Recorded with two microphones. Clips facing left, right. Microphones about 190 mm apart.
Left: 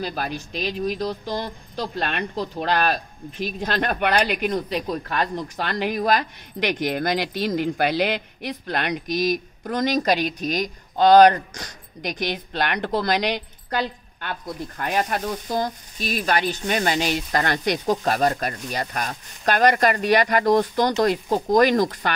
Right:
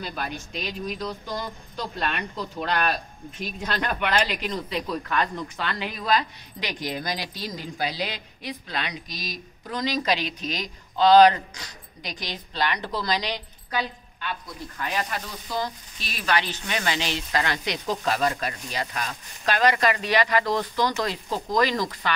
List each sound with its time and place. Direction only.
0.0 s speech: 40° left (ahead or behind)
3.8 s speech: 50° left (ahead or behind)
4.8 s speech: 35° left (ahead or behind)
5.6 s speech: 50° left (ahead or behind)